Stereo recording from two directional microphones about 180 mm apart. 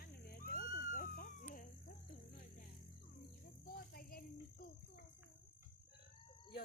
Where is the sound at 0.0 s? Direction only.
60° left (ahead or behind).